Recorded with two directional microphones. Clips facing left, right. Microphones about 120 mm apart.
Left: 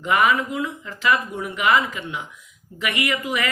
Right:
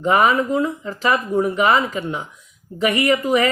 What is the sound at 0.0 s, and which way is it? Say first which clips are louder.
Speech: right 3 dB; 35° right (ahead or behind).